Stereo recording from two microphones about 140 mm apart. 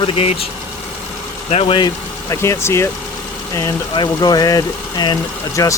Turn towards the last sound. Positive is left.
turn(degrees=25)  # may be behind; listen again after turning